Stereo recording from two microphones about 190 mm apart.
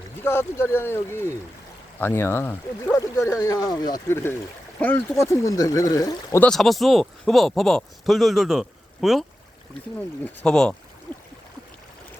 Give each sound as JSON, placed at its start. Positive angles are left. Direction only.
{"t": 0.2, "sound": "speech", "side_deg": 10}
{"t": 6.5, "sound": "speech", "side_deg": 0}
{"t": 10.4, "sound": "speech", "side_deg": 5}